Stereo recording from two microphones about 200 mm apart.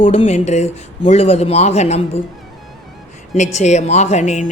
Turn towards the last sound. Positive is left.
turn(degrees=35)  # may be behind; listen again after turning